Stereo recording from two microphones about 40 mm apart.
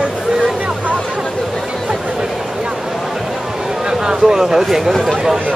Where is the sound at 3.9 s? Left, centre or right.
Centre.